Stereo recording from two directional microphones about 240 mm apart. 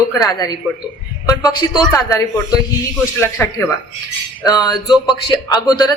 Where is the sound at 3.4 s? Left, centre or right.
Centre.